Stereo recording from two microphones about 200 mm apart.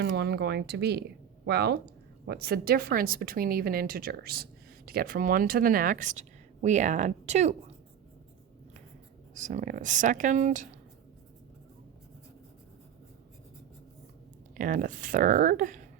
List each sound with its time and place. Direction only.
0.0 s speech: 55° right (ahead or behind); by 7.5 s 35° right (ahead or behind)
9.3 s speech: 40° right (ahead or behind)
14.5 s speech: 40° right (ahead or behind)